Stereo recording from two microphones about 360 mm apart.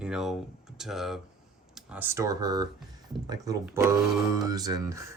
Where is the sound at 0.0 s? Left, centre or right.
Centre.